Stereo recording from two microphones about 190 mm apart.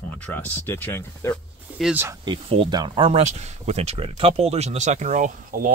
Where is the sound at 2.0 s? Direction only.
25° right (ahead or behind).